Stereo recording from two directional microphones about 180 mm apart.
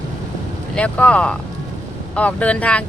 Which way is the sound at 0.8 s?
5° left (ahead or behind).